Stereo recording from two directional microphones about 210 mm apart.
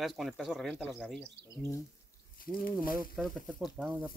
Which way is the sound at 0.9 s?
5° left (ahead or behind).